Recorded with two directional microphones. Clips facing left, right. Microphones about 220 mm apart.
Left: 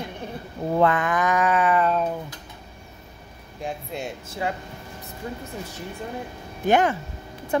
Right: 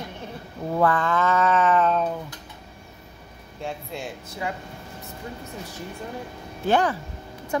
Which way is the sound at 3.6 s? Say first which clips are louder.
Left 2 dB; 20° left (ahead or behind).